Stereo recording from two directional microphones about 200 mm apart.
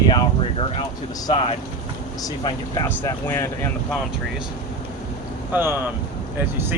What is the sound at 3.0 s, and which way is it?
Speech, 10° left (ahead or behind).